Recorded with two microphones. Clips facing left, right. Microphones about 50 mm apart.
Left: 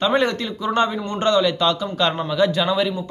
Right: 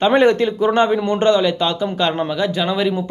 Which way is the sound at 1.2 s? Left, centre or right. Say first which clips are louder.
Even; centre.